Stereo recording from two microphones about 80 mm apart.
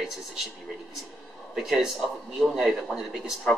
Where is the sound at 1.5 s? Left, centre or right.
Centre.